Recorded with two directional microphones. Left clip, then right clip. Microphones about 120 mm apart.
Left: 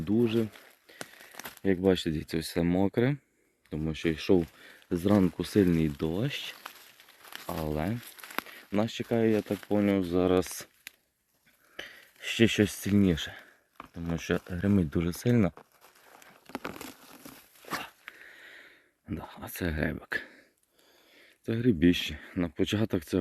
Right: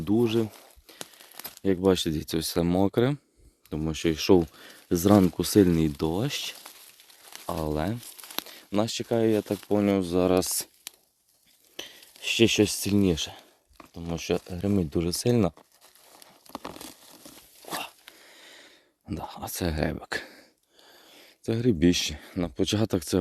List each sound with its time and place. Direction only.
0.0 s speech: 75° right (ahead or behind)
1.6 s speech: 60° right (ahead or behind)
3.7 s speech: 85° right
5.2 s speech: 50° right (ahead or behind)
7.4 s speech: 80° right
8.0 s crumpling: 20° right (ahead or behind)
8.4 s speech: 45° right (ahead or behind)
9.6 s speech: 60° right (ahead or behind)
11.8 s speech: 30° right (ahead or behind)
14.1 s speech: 20° right (ahead or behind)
15.0 s speech: 40° right (ahead or behind)
16.5 s tearing: 5° left (ahead or behind)
18.2 s a sound: 40° right (ahead or behind); by 20.4 s 80° right
21.4 s speech: 50° right (ahead or behind); by 22.8 s 35° right (ahead or behind)